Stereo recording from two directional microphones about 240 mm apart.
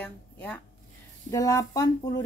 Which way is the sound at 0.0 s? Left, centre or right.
Centre.